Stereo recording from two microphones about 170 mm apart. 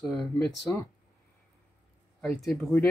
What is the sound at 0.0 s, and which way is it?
Speech, centre (ahead or behind).